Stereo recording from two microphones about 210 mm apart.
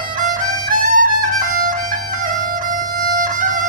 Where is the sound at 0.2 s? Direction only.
40° right (ahead or behind).